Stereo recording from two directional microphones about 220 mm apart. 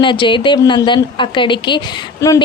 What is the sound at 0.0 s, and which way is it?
Speech, 20° left (ahead or behind).